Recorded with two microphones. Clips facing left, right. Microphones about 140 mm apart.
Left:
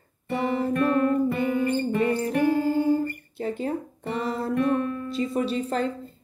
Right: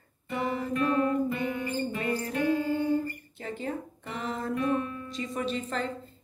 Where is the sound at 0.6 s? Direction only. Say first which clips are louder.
Left 4 dB; 50° left (ahead or behind).